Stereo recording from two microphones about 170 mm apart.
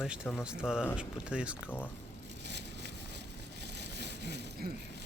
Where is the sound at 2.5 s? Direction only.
90° right.